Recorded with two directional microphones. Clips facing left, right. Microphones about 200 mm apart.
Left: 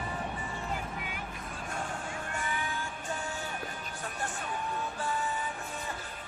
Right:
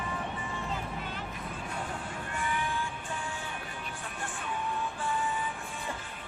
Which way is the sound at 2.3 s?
45° left (ahead or behind).